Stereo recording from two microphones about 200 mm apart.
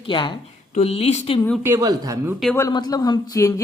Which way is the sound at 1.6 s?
15° right (ahead or behind).